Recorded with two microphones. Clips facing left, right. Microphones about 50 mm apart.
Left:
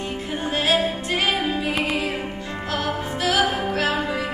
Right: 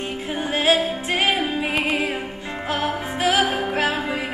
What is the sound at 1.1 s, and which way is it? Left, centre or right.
Music, right.